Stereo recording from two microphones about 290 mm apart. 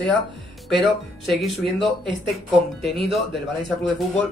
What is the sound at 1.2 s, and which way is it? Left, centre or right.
Speech, centre.